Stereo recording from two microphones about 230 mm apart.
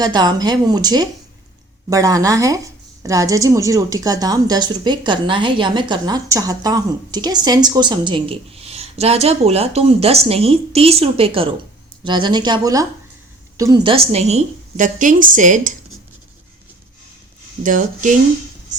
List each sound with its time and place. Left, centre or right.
0.0 s a woman's voice: centre; by 15.7 s right
17.6 s speech: right